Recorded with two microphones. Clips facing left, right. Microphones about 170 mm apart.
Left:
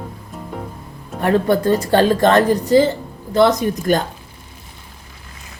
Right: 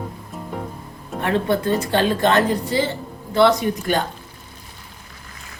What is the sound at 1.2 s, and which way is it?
Speech, 40° left (ahead or behind).